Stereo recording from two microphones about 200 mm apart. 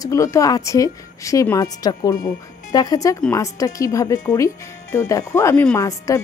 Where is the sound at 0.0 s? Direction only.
15° left (ahead or behind).